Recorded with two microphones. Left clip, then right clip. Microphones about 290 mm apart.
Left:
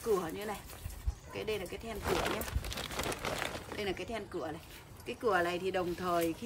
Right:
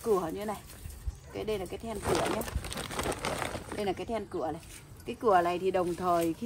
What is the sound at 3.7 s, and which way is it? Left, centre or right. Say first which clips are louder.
Speech: right 6 dB; centre.